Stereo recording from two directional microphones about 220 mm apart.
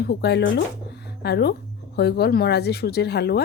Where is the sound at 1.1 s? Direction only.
50° left (ahead or behind).